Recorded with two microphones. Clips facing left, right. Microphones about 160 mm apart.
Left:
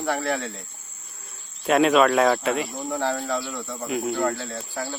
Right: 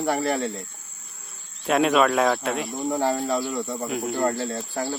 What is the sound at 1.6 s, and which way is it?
Speech, centre (ahead or behind).